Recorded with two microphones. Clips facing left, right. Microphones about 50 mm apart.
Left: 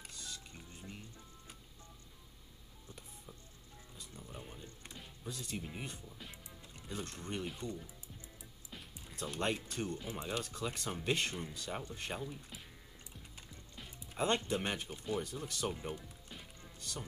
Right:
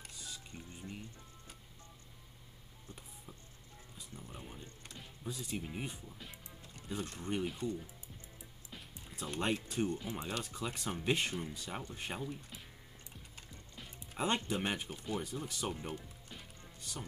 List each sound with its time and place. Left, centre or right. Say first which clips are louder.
0.1 s music: right 1 dB; centre
4.0 s music: even; centre
6.8 s speech: right 2 dB; centre
8.7 s speech: left 1 dB; centre
13.5 s music: right 1 dB; centre
14.1 s speech: left 1 dB; centre
15.7 s music: even; centre